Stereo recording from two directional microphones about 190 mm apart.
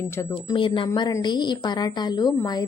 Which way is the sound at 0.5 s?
25° left (ahead or behind).